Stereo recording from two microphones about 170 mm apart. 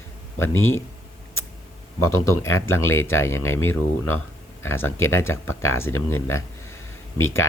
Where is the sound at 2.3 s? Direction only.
15° left (ahead or behind).